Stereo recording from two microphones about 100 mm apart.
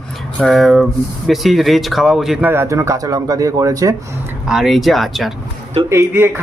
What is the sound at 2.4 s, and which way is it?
Speech, 25° right (ahead or behind).